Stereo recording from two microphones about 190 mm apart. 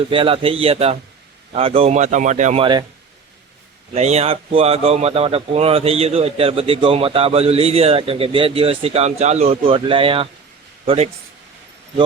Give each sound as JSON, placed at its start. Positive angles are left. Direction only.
{"t": 0.1, "sound": "speech", "side_deg": -30}
{"t": 3.9, "sound": "speech", "side_deg": -35}